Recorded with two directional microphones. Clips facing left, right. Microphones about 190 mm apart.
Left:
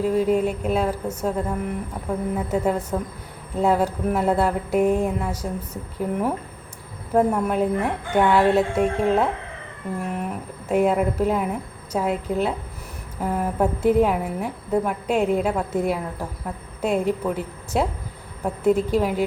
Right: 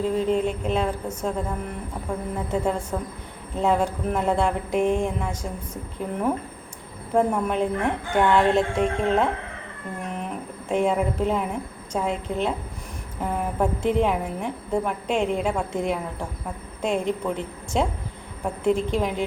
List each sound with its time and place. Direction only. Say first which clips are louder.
0.0 s a woman's voice: left 2 dB; 10° left (ahead or behind)